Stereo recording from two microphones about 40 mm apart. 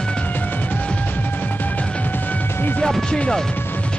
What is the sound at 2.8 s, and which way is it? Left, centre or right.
Music, centre.